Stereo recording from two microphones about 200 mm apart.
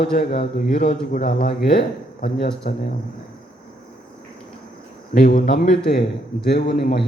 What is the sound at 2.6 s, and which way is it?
Speech, 45° left (ahead or behind).